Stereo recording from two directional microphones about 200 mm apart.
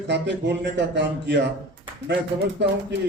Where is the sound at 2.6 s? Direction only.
60° right (ahead or behind).